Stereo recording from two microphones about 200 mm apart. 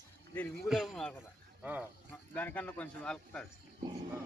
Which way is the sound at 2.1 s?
10° left (ahead or behind).